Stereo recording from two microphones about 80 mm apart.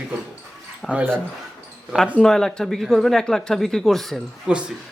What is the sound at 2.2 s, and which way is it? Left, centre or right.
Speech, centre.